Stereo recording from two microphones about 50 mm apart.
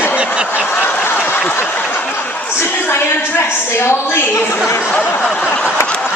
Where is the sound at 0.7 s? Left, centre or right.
Left.